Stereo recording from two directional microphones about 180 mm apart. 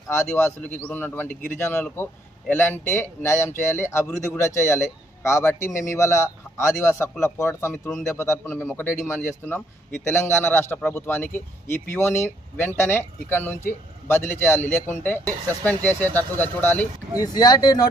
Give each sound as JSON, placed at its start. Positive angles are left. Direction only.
{"t": 0.1, "sound": "speech", "side_deg": 15}
{"t": 17.2, "sound": "speech", "side_deg": 20}